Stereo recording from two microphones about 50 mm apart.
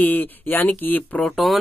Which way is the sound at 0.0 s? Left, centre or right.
Left.